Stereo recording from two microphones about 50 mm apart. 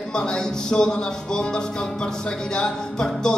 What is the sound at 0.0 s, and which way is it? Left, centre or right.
Speech, centre.